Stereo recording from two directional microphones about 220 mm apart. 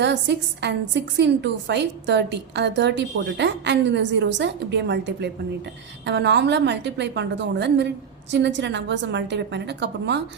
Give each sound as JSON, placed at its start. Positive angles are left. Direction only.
{"t": 0.0, "sound": "a woman's voice", "side_deg": -50}